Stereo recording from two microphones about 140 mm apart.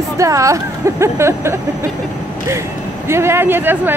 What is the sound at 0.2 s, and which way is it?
Speech, 20° right (ahead or behind).